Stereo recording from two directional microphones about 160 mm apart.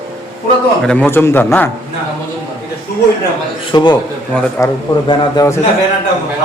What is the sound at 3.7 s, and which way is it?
A man's voice, 25° left (ahead or behind).